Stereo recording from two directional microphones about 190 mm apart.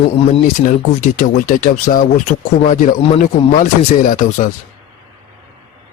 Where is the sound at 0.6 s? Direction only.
45° left (ahead or behind).